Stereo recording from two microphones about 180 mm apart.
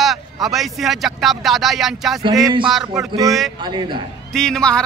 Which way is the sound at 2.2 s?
25° right (ahead or behind).